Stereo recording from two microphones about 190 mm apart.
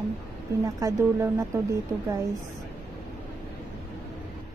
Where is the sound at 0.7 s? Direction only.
15° right (ahead or behind).